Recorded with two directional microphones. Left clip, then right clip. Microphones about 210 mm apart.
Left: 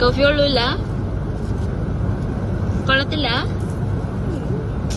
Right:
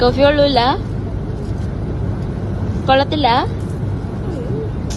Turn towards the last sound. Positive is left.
turn(degrees=-20)  # may be behind; listen again after turning